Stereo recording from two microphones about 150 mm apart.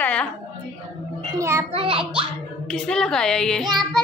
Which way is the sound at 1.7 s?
40° right (ahead or behind).